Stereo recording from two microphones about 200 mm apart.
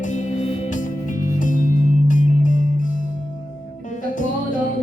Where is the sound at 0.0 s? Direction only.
35° left (ahead or behind).